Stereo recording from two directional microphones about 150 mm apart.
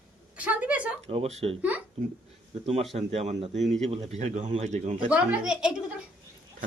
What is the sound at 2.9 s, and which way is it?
Speech, 45° right (ahead or behind).